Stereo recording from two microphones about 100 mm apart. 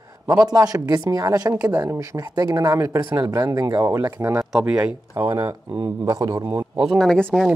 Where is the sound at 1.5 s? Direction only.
20° right (ahead or behind).